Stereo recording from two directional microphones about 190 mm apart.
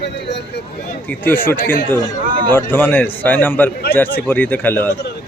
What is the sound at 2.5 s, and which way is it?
A man's voice, 10° left (ahead or behind).